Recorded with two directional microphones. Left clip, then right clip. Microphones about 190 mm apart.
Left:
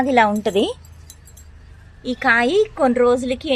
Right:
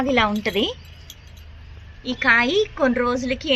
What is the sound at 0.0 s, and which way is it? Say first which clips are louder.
Speech: left 4 dB; 20° left (ahead or behind).